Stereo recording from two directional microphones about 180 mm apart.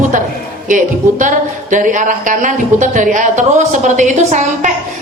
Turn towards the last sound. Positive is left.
turn(degrees=-40)  # may be behind; listen again after turning